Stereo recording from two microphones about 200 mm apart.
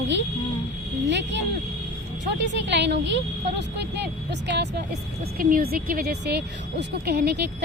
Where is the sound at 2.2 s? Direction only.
60° right (ahead or behind).